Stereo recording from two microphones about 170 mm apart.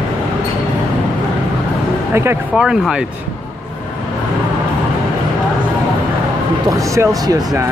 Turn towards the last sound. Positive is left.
turn(degrees=-20)  # may be behind; listen again after turning